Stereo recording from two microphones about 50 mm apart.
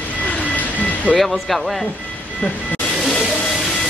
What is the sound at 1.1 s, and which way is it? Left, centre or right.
Speech, centre.